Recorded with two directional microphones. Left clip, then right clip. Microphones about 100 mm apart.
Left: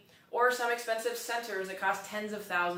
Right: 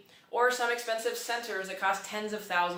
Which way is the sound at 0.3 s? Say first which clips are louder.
Right 1 dB; 20° right (ahead or behind).